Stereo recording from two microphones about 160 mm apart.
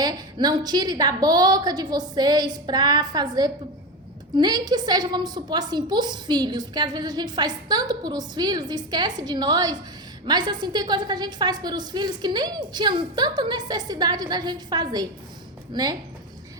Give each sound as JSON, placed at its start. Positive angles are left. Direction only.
{"t": 0.0, "sound": "a woman's voice", "side_deg": -25}